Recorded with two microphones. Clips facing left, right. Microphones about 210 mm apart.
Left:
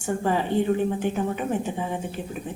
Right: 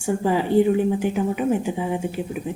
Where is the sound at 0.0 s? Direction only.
10° right (ahead or behind).